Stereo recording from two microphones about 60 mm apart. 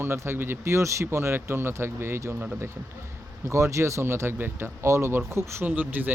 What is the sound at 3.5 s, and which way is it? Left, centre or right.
A man's voice, right.